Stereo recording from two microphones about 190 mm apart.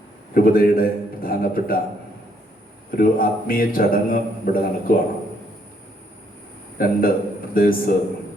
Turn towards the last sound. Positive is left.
turn(degrees=50)  # may be behind; listen again after turning